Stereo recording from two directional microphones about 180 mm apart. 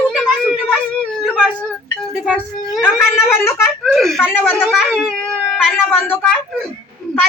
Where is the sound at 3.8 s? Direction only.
Centre (ahead or behind).